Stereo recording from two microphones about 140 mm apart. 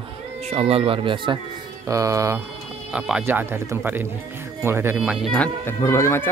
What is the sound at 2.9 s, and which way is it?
Speech, 10° right (ahead or behind).